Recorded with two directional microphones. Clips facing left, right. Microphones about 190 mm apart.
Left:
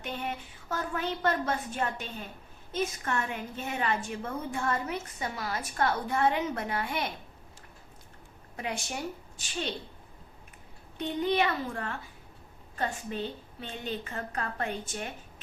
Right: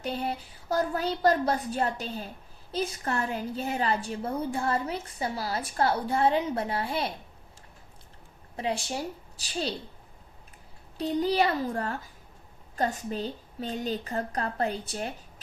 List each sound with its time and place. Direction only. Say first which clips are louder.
0.0 s a woman's voice: right 4 dB; 35° right (ahead or behind)
8.5 s a woman's voice: right 5 dB; 30° right (ahead or behind)
10.9 s a woman's voice: right 3 dB; 35° right (ahead or behind)